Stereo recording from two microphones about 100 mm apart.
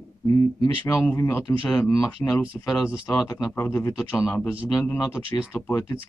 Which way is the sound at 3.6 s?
25° left (ahead or behind).